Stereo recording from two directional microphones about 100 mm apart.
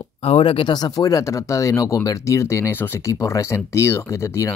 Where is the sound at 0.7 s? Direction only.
40° left (ahead or behind).